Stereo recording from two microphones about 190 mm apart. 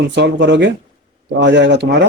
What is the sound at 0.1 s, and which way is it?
Speech, 65° right (ahead or behind).